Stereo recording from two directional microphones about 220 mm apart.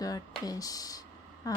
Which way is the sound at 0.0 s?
15° left (ahead or behind).